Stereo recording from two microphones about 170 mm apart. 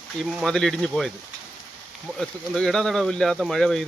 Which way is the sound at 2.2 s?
5° left (ahead or behind).